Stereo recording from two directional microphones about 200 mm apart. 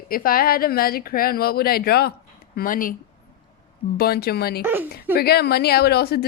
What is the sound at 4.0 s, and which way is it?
Speech, 50° left (ahead or behind).